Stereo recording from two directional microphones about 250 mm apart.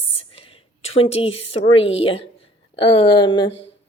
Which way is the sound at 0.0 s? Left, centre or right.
Left.